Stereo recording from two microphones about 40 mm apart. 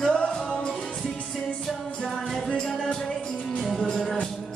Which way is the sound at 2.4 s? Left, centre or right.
Centre.